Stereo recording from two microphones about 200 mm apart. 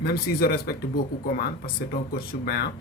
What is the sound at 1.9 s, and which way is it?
Speech, 50° left (ahead or behind).